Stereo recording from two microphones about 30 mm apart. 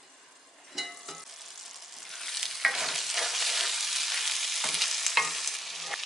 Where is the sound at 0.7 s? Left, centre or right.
Centre.